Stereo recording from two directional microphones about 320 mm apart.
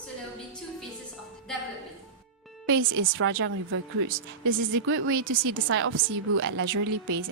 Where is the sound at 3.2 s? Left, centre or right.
Right.